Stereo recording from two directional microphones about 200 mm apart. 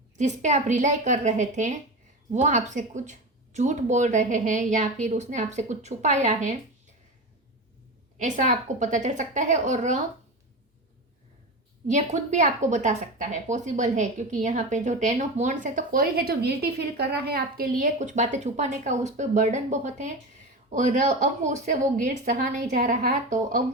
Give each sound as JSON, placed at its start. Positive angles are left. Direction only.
{"t": 0.2, "sound": "a woman's voice", "side_deg": -35}
{"t": 8.2, "sound": "a woman's voice", "side_deg": -40}
{"t": 11.9, "sound": "a woman's voice", "side_deg": -35}